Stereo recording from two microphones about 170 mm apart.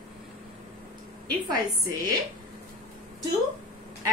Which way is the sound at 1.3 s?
25° right (ahead or behind).